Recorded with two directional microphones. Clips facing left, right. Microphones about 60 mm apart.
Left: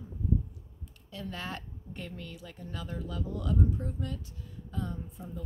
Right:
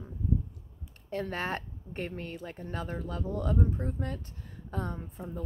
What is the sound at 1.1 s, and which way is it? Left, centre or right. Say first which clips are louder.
Speech: right 6 dB; right.